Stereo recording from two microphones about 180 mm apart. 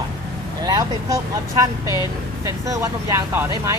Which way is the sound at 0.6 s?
20° right (ahead or behind).